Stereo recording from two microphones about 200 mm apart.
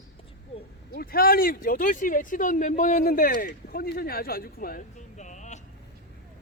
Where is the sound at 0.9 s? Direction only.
50° left (ahead or behind).